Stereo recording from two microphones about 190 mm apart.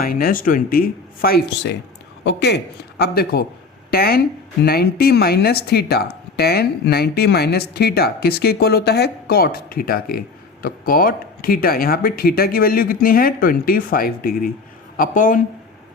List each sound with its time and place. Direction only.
0.0 s speech: 50° left (ahead or behind)